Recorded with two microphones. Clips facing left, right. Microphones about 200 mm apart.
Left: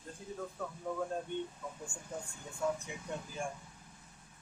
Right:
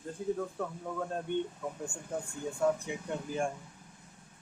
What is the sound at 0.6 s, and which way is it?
Speech, 65° right (ahead or behind).